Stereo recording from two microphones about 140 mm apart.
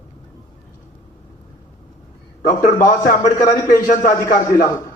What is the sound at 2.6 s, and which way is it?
Speech, 85° left.